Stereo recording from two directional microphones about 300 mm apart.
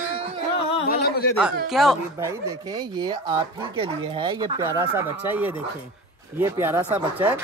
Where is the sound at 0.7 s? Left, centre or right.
Left.